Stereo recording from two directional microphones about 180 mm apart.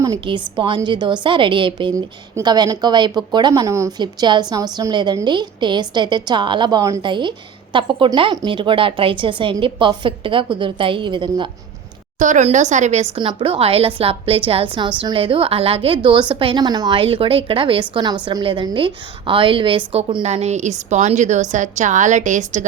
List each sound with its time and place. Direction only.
0.0 s a woman's voice: 20° right (ahead or behind)
12.2 s a woman's voice: 40° right (ahead or behind)
13.1 s a woman's voice: 30° right (ahead or behind)